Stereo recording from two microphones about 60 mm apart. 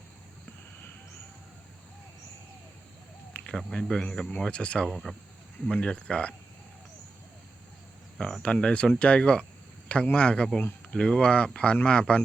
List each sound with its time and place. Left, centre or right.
3.3 s cricket: centre
3.7 s speech: centre
4.9 s speech: centre
5.6 s speech: centre
8.4 s speech: centre